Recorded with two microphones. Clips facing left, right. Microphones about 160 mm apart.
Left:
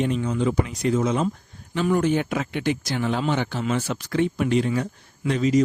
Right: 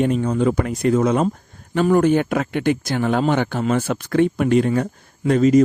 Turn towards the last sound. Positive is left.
turn(degrees=-50)  # may be behind; listen again after turning